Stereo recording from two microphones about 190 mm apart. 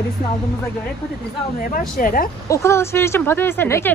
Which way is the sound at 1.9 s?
45° left (ahead or behind).